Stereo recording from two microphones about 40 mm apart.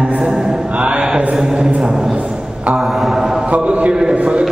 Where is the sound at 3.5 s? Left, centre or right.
Right.